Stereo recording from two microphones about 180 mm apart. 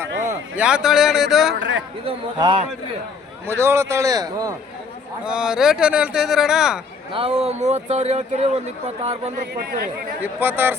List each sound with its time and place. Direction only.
0.5 s speech: 5° right (ahead or behind)
1.5 s a man's voice: 90° right
2.0 s a man's voice: 30° right (ahead or behind)
3.4 s a man's voice: 15° right (ahead or behind)
5.2 s speech: 5° right (ahead or behind)
7.1 s speech: 30° right (ahead or behind)
9.6 s speech: 55° right (ahead or behind)
10.4 s a man's voice: 10° right (ahead or behind)